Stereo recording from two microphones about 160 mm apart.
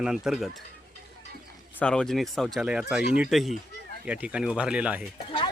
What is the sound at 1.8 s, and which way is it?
Speech, 5° left (ahead or behind).